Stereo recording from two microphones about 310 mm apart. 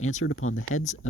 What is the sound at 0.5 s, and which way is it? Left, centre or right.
Speech, left.